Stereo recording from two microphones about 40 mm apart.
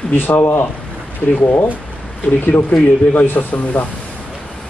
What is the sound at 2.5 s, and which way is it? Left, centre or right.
Speech, left.